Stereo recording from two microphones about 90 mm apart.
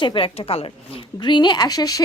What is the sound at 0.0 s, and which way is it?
A woman's voice, 70° left (ahead or behind).